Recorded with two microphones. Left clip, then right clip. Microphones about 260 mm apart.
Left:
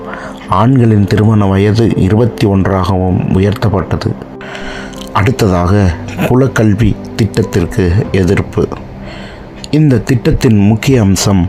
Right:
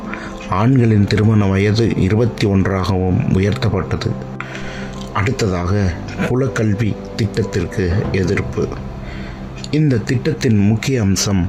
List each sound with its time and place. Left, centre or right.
0.5 s speech: centre
5.1 s speech: centre
9.7 s speech: centre